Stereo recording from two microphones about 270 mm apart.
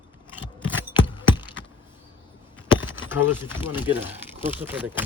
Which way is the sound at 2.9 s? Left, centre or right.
Centre.